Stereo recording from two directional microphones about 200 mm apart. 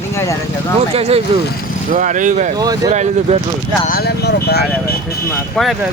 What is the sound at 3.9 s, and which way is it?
Speech, 50° left (ahead or behind).